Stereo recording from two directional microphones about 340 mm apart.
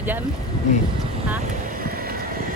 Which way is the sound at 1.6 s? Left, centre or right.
Right.